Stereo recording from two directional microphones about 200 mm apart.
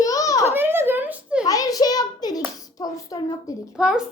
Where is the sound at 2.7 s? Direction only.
20° left (ahead or behind).